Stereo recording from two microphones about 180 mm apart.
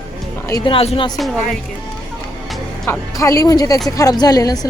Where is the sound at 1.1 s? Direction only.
Centre (ahead or behind).